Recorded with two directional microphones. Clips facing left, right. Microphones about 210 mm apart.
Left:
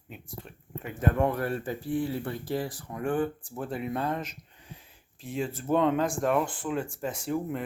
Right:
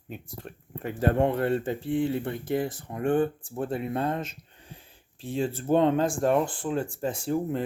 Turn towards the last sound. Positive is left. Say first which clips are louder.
# right 3 dB
turn(degrees=-30)  # may be behind; listen again after turning